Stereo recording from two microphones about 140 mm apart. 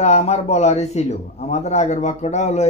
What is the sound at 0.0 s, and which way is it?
A man's voice, 55° left (ahead or behind).